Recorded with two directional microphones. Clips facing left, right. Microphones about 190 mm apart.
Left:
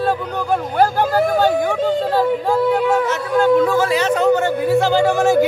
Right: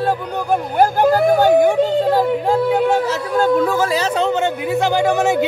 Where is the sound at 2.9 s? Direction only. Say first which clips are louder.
Left 1 dB; 40° right (ahead or behind).